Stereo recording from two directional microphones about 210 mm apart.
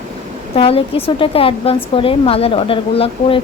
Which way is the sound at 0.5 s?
25° left (ahead or behind).